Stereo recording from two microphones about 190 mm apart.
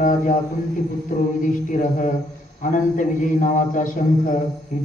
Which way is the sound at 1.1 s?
40° left (ahead or behind).